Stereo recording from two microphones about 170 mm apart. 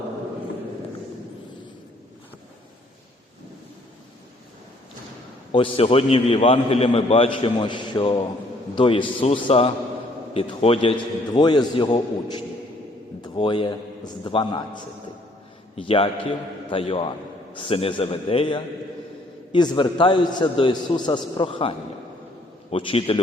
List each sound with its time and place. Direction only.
5.5 s a man's voice: 35° left (ahead or behind)
11.3 s a man's voice: 25° left (ahead or behind)